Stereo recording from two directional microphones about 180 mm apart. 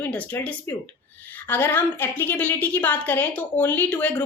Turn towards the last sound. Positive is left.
turn(degrees=10)  # may be behind; listen again after turning